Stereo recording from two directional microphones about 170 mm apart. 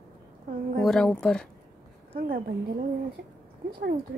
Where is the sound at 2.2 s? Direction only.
55° right (ahead or behind).